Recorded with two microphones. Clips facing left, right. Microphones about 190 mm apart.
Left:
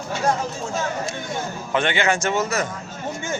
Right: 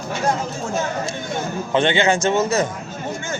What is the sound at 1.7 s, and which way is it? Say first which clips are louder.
Speech: right 4 dB; 20° right (ahead or behind).